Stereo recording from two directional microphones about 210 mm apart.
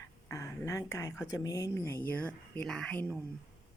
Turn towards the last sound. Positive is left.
turn(degrees=5)  # may be behind; listen again after turning